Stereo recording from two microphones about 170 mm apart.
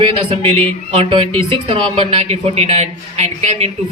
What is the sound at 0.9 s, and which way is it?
Speech, 35° right (ahead or behind).